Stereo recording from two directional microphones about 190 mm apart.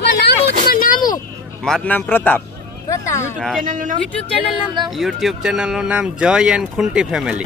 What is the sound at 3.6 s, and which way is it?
Speech, 45° right (ahead or behind).